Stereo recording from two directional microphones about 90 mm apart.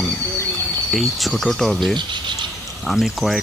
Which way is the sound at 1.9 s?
60° right (ahead or behind).